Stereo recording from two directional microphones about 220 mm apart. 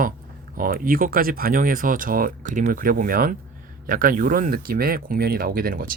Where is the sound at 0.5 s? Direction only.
40° right (ahead or behind).